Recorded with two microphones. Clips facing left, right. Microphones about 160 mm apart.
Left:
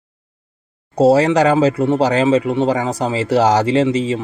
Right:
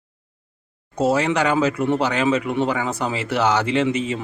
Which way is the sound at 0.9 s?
35° left (ahead or behind).